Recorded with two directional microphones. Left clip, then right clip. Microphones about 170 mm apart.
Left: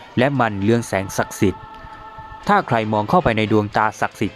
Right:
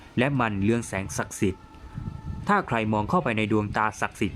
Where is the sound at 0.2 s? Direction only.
30° left (ahead or behind).